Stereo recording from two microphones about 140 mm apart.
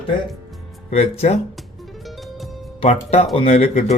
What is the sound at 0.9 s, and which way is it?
Speech, 50° left (ahead or behind).